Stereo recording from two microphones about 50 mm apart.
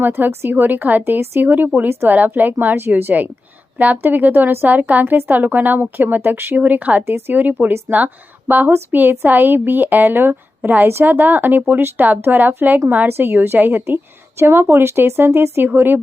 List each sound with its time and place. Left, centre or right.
0.0 s a woman's voice: right
6.6 s a woman's voice: right
13.1 s speech: right
14.3 s speech: right